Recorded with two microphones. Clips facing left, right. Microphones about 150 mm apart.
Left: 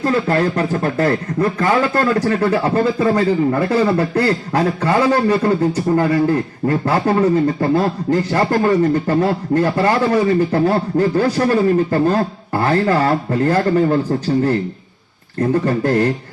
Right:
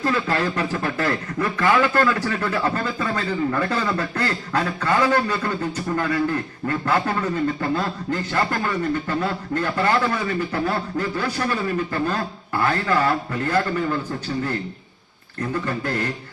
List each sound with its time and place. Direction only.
0.0 s speech: 35° left (ahead or behind)